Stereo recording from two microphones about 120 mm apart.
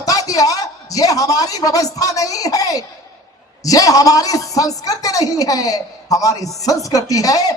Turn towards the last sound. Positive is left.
turn(degrees=30)  # may be behind; listen again after turning